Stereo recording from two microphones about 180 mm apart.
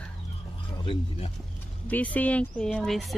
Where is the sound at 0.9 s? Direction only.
35° left (ahead or behind).